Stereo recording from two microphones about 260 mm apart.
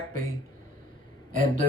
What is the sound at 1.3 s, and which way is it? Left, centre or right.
Speech, right.